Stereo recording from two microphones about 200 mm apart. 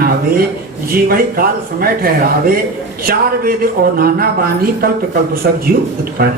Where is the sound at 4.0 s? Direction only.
45° right (ahead or behind).